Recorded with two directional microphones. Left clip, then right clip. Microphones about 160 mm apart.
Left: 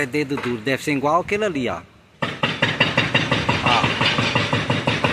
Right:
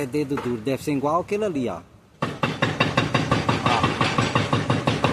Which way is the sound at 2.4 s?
15° right (ahead or behind).